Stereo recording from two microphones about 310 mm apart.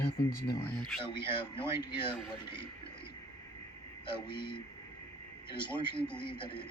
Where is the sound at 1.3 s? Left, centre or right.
Centre.